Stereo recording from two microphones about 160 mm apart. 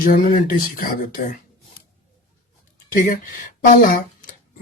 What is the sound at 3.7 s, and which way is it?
Speech, 70° left (ahead or behind).